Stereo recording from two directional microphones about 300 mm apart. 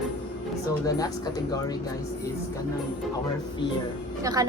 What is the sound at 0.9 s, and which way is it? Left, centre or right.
Speech, centre.